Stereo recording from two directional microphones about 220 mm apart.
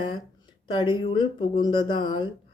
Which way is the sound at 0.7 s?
20° left (ahead or behind).